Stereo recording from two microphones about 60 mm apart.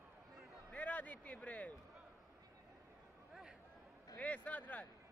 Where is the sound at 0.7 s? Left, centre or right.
Left.